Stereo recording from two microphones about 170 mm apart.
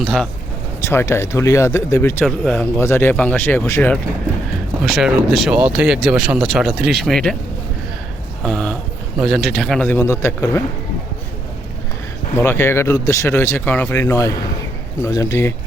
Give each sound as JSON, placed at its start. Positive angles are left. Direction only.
{"t": 0.0, "sound": "speech", "side_deg": 0}
{"t": 0.8, "sound": "speech", "side_deg": 15}
{"t": 2.2, "sound": "speech", "side_deg": 0}
{"t": 4.8, "sound": "speech", "side_deg": -5}
{"t": 8.4, "sound": "speech", "side_deg": 5}
{"t": 12.4, "sound": "speech", "side_deg": 15}